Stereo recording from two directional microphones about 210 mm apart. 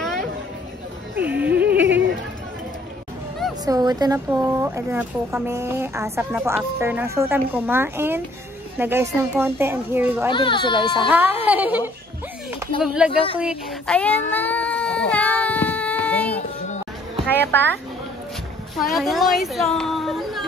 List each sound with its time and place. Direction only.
1.1 s music: 10° right (ahead or behind)
3.6 s speech: 20° right (ahead or behind)
10.3 s a child's voice: 20° left (ahead or behind)
11.1 s speech: 10° right (ahead or behind)
13.9 s a sound: 5° left (ahead or behind)
17.3 s a woman's voice: 10° left (ahead or behind)
18.8 s speech: centre (ahead or behind)